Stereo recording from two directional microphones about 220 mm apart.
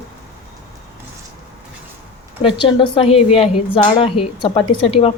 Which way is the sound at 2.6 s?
25° left (ahead or behind).